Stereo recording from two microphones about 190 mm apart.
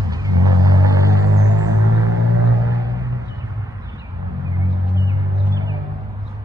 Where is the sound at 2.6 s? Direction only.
20° right (ahead or behind).